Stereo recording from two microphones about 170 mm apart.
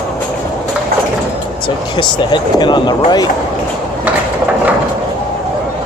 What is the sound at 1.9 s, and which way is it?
Speech, 25° left (ahead or behind).